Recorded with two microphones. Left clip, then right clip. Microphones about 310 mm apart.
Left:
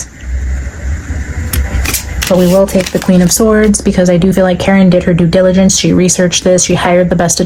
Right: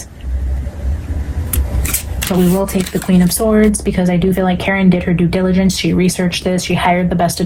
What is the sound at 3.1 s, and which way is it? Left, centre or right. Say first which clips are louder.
Speech: left 4 dB; left.